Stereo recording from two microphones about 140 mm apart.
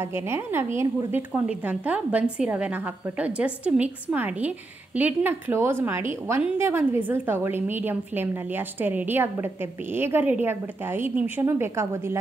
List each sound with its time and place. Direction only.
0.0 s a woman's voice: 20° right (ahead or behind)